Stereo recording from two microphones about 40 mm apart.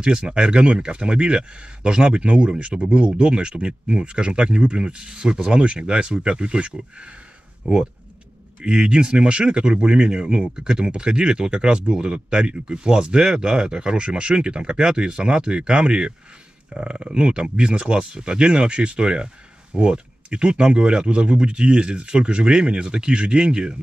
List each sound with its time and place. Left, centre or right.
0.0 s speech: right